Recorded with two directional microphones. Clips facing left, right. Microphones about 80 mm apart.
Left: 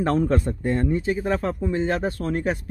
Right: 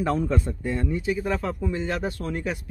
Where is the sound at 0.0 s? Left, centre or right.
Left.